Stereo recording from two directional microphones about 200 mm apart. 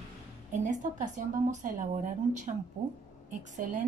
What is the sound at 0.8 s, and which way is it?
A woman's voice, 40° right (ahead or behind).